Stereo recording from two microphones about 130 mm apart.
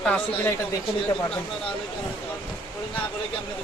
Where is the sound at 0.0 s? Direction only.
10° left (ahead or behind).